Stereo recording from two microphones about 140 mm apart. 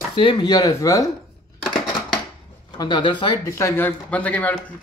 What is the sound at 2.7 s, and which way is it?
Speech, 30° left (ahead or behind).